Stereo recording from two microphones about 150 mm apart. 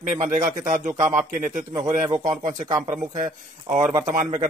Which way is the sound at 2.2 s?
25° right (ahead or behind).